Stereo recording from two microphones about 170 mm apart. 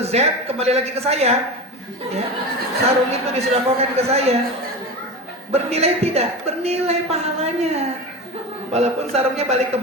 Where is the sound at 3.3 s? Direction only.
40° right (ahead or behind).